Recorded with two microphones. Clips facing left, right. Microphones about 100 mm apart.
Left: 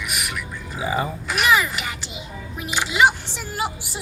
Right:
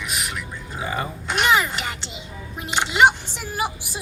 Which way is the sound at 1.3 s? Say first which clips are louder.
Even; 25° right (ahead or behind).